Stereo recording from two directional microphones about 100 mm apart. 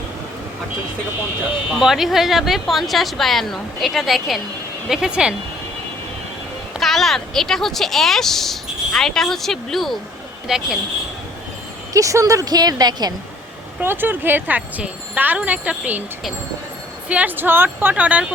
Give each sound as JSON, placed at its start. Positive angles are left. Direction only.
{"t": 1.7, "sound": "speech", "side_deg": -5}
{"t": 6.7, "sound": "speech", "side_deg": 0}
{"t": 11.9, "sound": "speech", "side_deg": -35}
{"t": 13.8, "sound": "speech", "side_deg": -20}
{"t": 17.1, "sound": "speech", "side_deg": -15}